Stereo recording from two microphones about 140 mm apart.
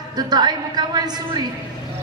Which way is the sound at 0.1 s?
30° right (ahead or behind).